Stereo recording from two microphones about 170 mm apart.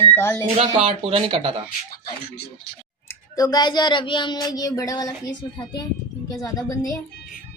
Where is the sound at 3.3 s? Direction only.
20° left (ahead or behind).